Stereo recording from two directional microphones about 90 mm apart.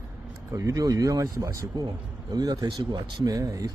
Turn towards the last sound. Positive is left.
turn(degrees=-40)  # may be behind; listen again after turning